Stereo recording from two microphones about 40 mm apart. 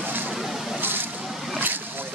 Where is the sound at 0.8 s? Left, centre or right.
Right.